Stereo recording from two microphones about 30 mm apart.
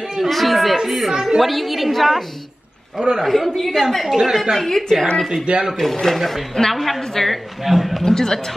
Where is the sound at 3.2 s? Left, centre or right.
Centre.